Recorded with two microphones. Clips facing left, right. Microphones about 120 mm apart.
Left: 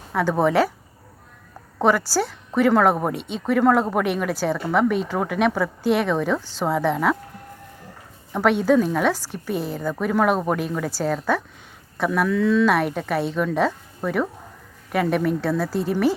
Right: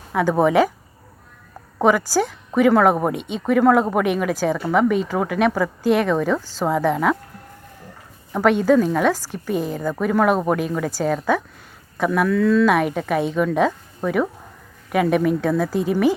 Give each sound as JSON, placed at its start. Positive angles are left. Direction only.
{"t": 0.1, "sound": "speech", "side_deg": -10}
{"t": 1.8, "sound": "speech", "side_deg": -10}
{"t": 6.4, "sound": "a woman's voice", "side_deg": -40}
{"t": 6.7, "sound": "speech", "side_deg": -5}
{"t": 8.3, "sound": "a woman's voice", "side_deg": 0}